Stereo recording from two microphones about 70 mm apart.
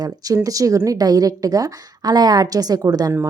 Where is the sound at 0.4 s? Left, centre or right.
Right.